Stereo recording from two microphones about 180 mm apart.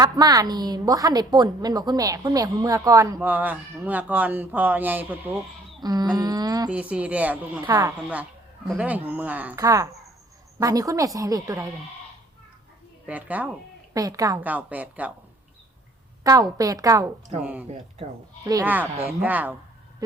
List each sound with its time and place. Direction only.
0.0 s a woman's voice: 20° right (ahead or behind)
5.8 s a woman's voice: 20° right (ahead or behind)
6.7 s a woman's voice: 5° right (ahead or behind)
13.1 s speech: 10° right (ahead or behind)
13.9 s speech: 20° right (ahead or behind)
16.2 s a woman's voice: 20° right (ahead or behind)
17.4 s speech: 10° right (ahead or behind)
20.0 s a sound: 20° right (ahead or behind)